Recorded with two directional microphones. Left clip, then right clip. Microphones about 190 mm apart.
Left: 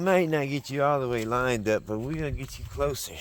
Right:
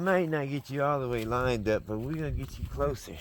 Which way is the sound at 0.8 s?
10° right (ahead or behind).